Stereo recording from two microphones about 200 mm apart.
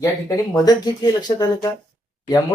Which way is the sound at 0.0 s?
20° left (ahead or behind).